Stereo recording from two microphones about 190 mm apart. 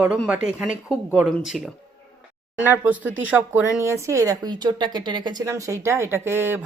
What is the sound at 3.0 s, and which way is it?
Speech, 90° right.